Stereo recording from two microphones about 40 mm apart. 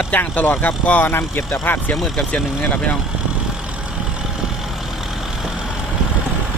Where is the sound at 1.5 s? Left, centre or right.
Left.